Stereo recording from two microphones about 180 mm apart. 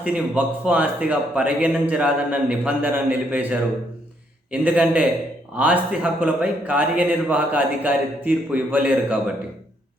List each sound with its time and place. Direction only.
0.0 s a man's voice: 5° right (ahead or behind)